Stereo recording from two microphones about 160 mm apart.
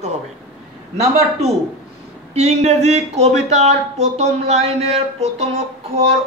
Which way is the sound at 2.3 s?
40° right (ahead or behind).